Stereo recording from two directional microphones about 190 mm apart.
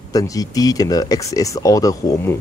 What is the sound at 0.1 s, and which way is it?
Speech, 20° left (ahead or behind).